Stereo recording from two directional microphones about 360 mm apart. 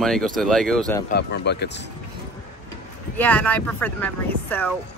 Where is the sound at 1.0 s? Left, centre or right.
Left.